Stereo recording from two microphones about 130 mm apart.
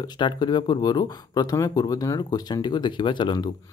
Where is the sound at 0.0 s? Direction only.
35° left (ahead or behind).